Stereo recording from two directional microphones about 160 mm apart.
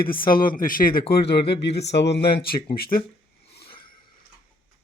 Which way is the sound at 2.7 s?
70° left (ahead or behind).